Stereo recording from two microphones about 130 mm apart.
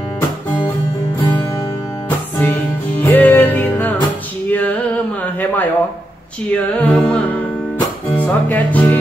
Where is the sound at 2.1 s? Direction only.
15° left (ahead or behind).